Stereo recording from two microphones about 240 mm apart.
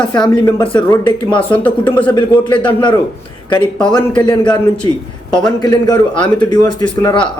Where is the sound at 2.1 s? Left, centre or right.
Centre.